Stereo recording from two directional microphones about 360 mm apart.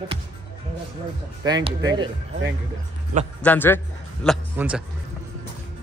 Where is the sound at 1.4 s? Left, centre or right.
Centre.